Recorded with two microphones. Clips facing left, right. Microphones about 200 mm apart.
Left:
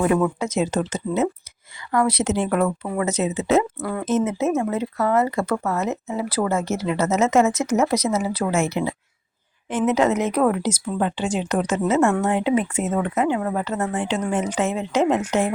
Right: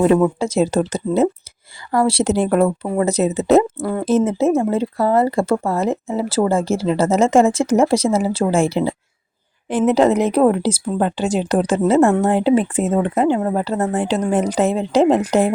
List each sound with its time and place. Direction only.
0.0 s speech: 25° right (ahead or behind)